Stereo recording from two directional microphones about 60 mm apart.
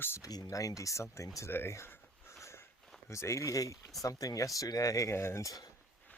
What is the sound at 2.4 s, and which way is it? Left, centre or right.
Sniff, left.